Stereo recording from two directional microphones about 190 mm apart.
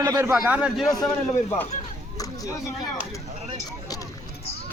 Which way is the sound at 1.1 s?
10° left (ahead or behind).